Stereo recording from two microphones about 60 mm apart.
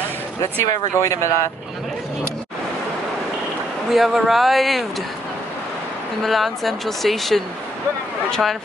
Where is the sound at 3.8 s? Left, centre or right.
Centre.